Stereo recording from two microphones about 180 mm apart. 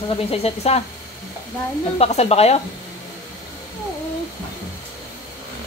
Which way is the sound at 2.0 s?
35° left (ahead or behind).